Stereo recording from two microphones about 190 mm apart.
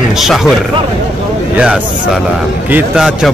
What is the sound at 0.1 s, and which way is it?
Speech, centre (ahead or behind).